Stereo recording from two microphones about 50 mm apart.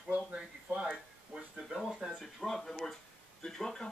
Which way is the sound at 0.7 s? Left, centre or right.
Right.